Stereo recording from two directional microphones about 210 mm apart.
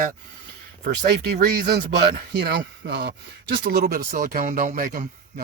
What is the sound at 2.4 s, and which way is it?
Speech, 55° right (ahead or behind).